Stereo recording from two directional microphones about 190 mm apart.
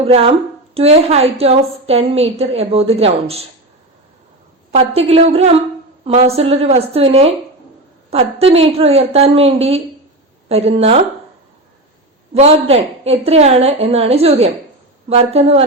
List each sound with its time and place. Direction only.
0.0 s a woman's voice: 30° right (ahead or behind)
4.7 s a woman's voice: 30° right (ahead or behind)
12.3 s a woman's voice: 35° right (ahead or behind)